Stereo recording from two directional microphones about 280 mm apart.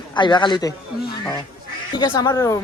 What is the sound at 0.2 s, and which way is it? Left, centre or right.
Speech, centre.